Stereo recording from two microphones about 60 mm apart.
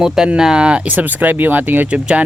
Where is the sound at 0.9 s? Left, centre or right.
Right.